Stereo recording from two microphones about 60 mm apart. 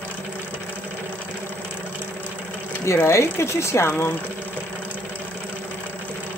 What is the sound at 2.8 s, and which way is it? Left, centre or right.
Speech, left.